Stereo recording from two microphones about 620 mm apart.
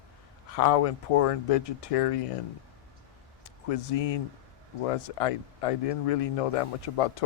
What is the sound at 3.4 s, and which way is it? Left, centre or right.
Speech, left.